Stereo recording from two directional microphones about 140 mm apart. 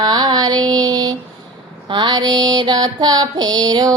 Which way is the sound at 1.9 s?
30° right (ahead or behind).